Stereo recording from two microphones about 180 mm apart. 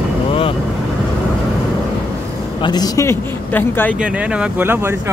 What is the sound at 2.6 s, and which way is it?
Speech, 20° left (ahead or behind).